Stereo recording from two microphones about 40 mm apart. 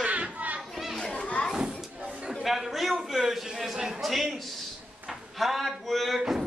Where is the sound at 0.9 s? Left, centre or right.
Left.